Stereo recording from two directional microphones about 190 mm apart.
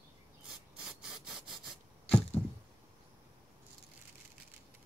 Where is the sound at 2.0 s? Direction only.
30° left (ahead or behind).